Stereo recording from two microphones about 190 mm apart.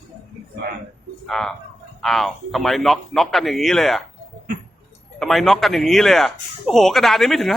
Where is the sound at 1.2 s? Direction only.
Centre (ahead or behind).